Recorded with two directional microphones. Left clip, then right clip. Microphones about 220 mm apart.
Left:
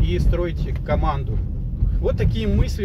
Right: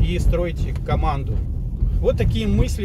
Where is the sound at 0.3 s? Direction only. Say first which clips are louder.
Right 2 dB; 30° right (ahead or behind).